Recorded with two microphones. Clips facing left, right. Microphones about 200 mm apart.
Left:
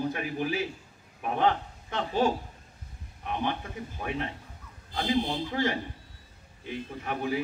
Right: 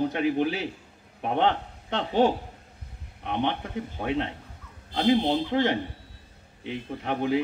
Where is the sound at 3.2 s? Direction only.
65° right (ahead or behind).